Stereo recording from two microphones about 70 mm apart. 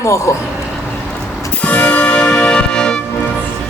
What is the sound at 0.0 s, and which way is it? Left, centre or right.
Speech, left.